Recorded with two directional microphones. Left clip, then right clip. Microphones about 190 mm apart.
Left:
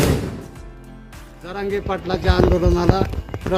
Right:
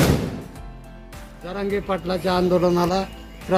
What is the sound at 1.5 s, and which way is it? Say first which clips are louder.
Speech: left 1 dB; 20° left (ahead or behind).